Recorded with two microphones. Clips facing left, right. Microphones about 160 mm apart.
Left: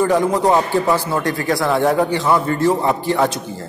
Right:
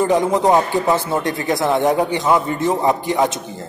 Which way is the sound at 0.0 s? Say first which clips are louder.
Even; 20° right (ahead or behind).